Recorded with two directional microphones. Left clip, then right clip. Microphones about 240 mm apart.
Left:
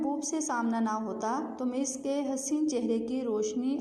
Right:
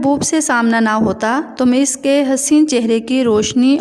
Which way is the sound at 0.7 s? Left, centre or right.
Right.